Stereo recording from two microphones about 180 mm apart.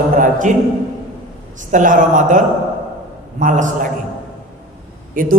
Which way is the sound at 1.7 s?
45° right (ahead or behind).